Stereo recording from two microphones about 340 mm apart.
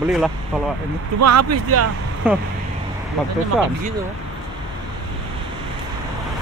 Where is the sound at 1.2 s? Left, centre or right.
Right.